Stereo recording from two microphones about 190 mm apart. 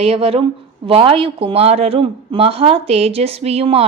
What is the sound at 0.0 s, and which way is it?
A man's voice, 30° right (ahead or behind).